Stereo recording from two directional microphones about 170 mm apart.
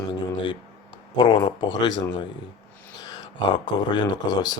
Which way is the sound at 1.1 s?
30° left (ahead or behind).